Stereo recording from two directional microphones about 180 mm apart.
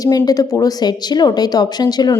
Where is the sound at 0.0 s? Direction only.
20° left (ahead or behind).